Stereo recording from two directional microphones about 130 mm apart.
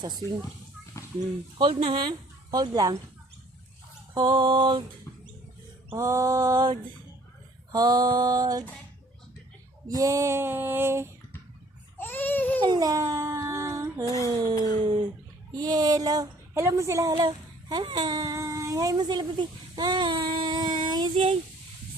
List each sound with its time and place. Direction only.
1.5 s speech: 45° right (ahead or behind); by 3.0 s 30° right (ahead or behind)
4.1 s speech: 35° right (ahead or behind)
5.9 s female singing: 20° right (ahead or behind)
7.7 s speech: 30° right (ahead or behind)
9.8 s female singing: 25° right (ahead or behind)
11.9 s babbling: 15° left (ahead or behind)
12.6 s a sound: 30° right (ahead or behind)
14.3 s female singing: 30° right (ahead or behind)
15.5 s speech: 30° right (ahead or behind)